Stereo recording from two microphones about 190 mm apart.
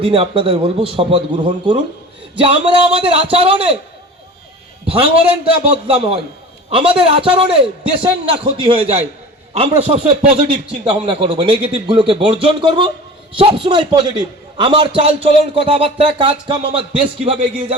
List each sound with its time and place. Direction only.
0.0 s speech: 30° right (ahead or behind)
4.9 s speech: 30° right (ahead or behind)